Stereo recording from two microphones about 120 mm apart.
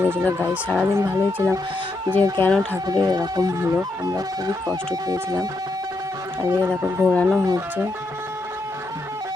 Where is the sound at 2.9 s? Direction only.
30° right (ahead or behind).